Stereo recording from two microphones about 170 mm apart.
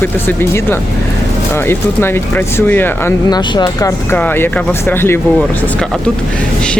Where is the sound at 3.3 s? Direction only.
25° left (ahead or behind).